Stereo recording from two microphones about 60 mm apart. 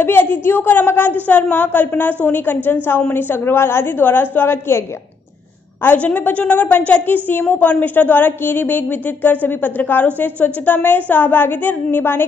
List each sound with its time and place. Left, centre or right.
0.0 s a woman's voice: left
5.9 s a woman's voice: left